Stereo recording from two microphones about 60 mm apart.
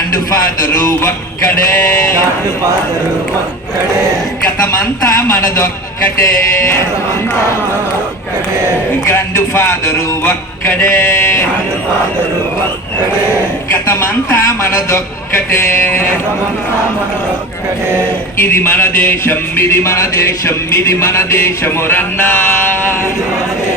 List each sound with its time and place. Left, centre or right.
5.0 s a man's voice: left
9.0 s speech: left
13.9 s speech: left
18.3 s speech: left